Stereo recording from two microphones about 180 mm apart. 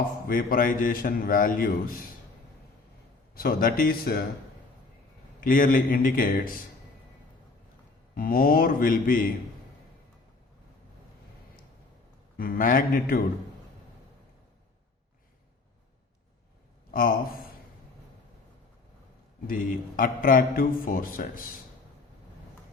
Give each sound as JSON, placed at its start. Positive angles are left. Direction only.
{"t": 0.3, "sound": "a man's voice", "side_deg": 50}
{"t": 3.3, "sound": "speech", "side_deg": 55}
{"t": 5.4, "sound": "a man's voice", "side_deg": 50}
{"t": 8.1, "sound": "a man's voice", "side_deg": 50}
{"t": 12.4, "sound": "a man's voice", "side_deg": 50}
{"t": 16.9, "sound": "a man's voice", "side_deg": 50}
{"t": 19.5, "sound": "a man's voice", "side_deg": 50}